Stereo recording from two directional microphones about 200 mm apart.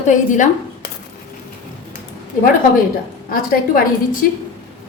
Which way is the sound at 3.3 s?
45° left (ahead or behind).